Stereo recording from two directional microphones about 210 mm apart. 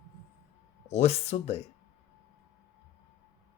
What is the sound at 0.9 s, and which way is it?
Speech, 30° left (ahead or behind).